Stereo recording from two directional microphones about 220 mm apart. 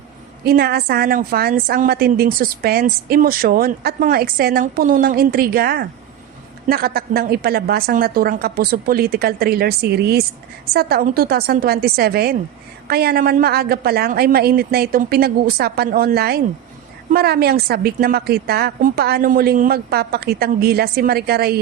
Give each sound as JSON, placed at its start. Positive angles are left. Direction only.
{"t": 0.4, "sound": "a woman's voice", "side_deg": -45}